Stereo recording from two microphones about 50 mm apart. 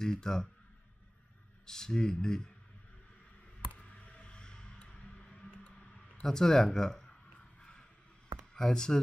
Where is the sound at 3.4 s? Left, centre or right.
Left.